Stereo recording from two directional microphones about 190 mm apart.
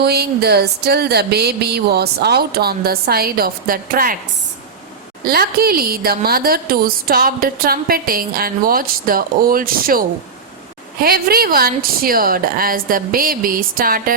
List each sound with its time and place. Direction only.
0.0 s a sound: 55° right (ahead or behind)
5.2 s a woman's voice: 55° right (ahead or behind)
11.0 s a woman's voice: 55° right (ahead or behind)